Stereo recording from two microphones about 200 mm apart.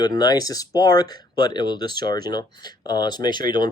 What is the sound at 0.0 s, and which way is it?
Speech, 20° left (ahead or behind).